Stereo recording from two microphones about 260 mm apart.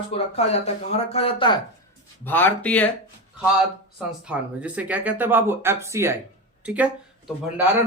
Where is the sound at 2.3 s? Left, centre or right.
Centre.